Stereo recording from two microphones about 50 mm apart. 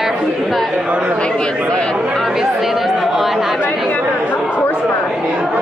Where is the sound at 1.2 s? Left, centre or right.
Centre.